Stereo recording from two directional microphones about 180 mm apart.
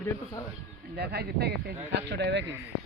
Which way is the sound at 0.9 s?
60° right (ahead or behind).